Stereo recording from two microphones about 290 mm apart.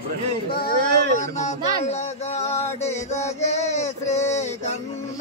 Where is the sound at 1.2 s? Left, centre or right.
Left.